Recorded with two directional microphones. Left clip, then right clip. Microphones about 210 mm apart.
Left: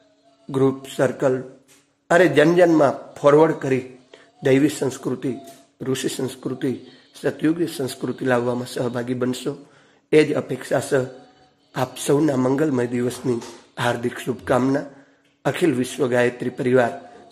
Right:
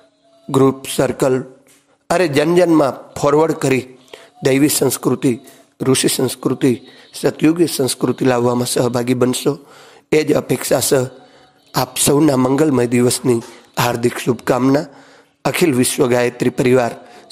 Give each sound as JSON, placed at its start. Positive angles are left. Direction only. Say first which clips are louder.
{"t": 0.5, "sound": "a man's voice", "louder": "right 6 dB", "side_deg": -30}